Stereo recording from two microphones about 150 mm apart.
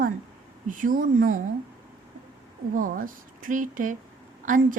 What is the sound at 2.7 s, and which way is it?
A woman's voice, 65° right (ahead or behind).